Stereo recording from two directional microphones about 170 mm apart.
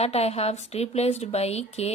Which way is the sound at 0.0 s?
35° left (ahead or behind).